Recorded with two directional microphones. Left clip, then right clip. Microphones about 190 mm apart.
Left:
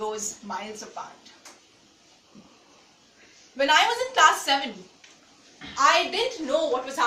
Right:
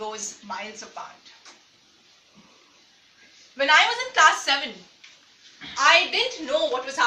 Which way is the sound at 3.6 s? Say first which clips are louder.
Right 2 dB; 15° left (ahead or behind).